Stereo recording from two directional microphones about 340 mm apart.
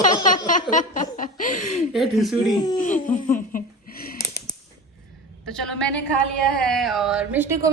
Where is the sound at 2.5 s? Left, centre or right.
Centre.